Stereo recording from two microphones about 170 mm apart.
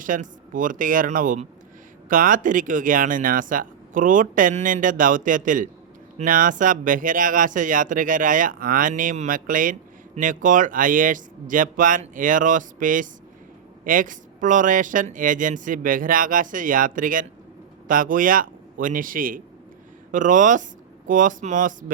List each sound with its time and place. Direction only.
0.0 s a man's voice: 50° right (ahead or behind)